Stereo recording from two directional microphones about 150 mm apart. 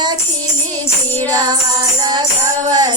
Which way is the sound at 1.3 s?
25° right (ahead or behind).